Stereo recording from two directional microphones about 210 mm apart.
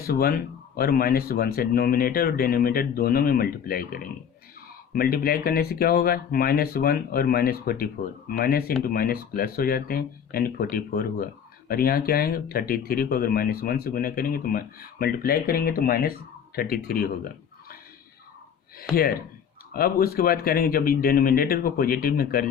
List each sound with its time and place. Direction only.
0.0 s speech: 45° left (ahead or behind)
18.8 s speech: 45° left (ahead or behind)